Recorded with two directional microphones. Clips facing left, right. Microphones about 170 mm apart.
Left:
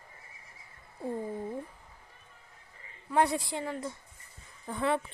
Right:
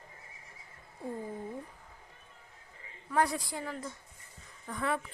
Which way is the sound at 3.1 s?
25° left (ahead or behind).